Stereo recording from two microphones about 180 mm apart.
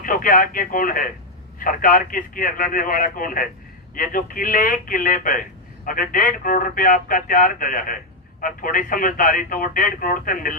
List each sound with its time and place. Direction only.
0.0 s speech: 50° left (ahead or behind)